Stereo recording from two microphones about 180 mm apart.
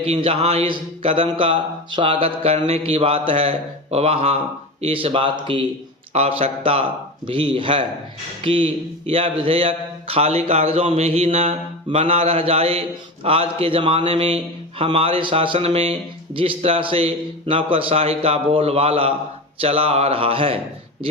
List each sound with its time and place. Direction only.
0.0 s a man's voice: 30° right (ahead or behind)